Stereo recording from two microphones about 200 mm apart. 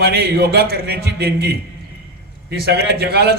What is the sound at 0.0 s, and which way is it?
A man's voice, 50° right (ahead or behind).